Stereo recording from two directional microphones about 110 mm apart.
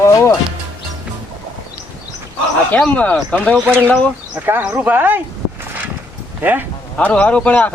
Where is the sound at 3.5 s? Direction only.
15° right (ahead or behind).